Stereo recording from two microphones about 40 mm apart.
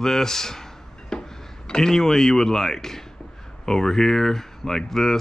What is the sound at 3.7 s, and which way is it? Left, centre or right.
Speech, centre.